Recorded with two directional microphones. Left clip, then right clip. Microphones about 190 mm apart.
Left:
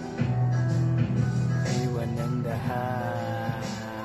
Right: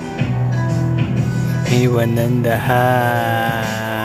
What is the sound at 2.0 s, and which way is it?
Speech, 30° right (ahead or behind).